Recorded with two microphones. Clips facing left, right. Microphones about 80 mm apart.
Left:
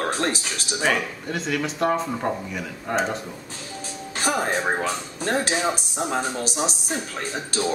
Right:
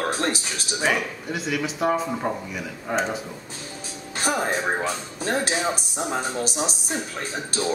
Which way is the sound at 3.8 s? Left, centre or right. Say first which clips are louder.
Left 1 dB; centre.